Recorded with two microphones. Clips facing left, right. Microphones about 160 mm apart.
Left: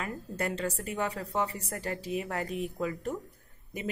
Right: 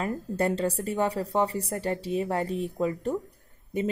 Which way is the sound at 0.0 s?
30° right (ahead or behind).